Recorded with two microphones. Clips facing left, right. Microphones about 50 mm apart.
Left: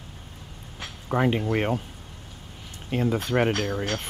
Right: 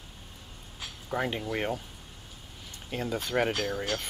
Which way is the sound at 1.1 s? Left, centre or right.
Left.